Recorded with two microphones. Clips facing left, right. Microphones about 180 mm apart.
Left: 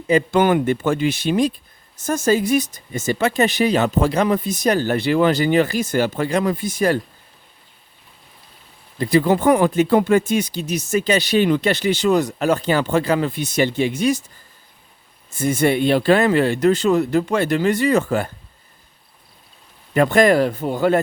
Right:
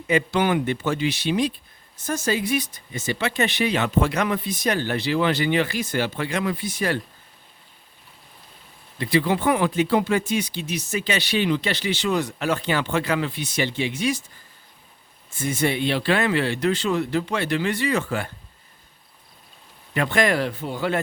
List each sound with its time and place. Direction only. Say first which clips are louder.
0.1 s speech: left 5 dB; 45° left (ahead or behind)
9.0 s speech: left 5 dB; 45° left (ahead or behind)
15.4 s speech: left 6 dB; 50° left (ahead or behind)
19.9 s speech: left 7 dB; 40° left (ahead or behind)